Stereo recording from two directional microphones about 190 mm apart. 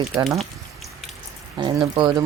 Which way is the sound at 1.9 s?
25° right (ahead or behind).